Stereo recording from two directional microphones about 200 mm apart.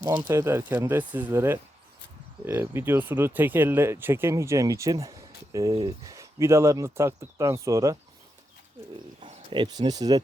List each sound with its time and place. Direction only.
0.2 s speech: 15° right (ahead or behind)
9.2 s speech: 25° right (ahead or behind)